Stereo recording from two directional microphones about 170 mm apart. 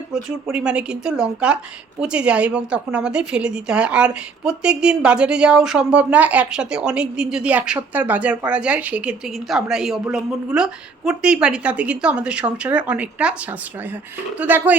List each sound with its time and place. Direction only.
0.1 s a woman's voice: 5° right (ahead or behind)